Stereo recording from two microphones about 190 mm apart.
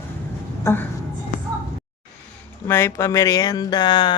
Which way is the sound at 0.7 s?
15° left (ahead or behind).